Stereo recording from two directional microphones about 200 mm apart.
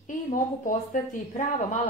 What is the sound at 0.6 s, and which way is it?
Speech, 40° left (ahead or behind).